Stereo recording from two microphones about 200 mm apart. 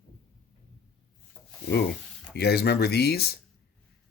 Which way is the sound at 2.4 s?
55° left (ahead or behind).